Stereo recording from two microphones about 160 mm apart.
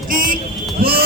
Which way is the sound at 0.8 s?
70° right (ahead or behind).